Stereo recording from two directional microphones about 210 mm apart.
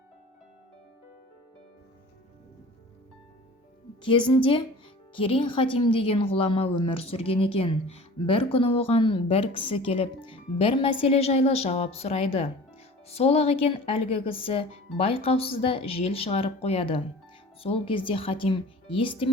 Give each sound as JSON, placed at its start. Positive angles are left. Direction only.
{"t": 4.0, "sound": "a woman's voice", "side_deg": 25}